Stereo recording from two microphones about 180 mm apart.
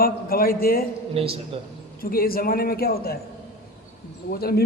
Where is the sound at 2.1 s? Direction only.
55° left (ahead or behind).